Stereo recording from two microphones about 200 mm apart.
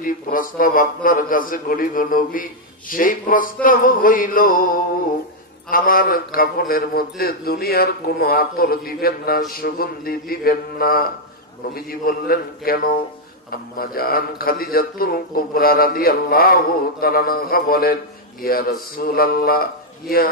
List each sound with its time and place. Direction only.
0.0 s a man's voice: 45° left (ahead or behind)
5.7 s a man's voice: 45° left (ahead or behind)